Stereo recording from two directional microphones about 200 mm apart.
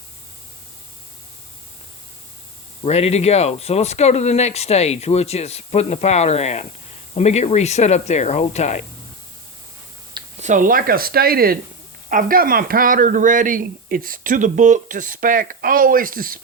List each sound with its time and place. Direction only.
2.8 s speech: 30° left (ahead or behind)
10.4 s speech: 40° right (ahead or behind)